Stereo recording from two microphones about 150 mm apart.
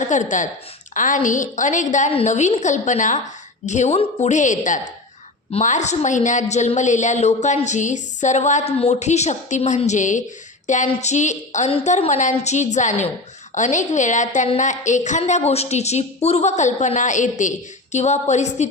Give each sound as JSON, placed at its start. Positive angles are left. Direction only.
{"t": 0.0, "sound": "a woman's voice", "side_deg": 55}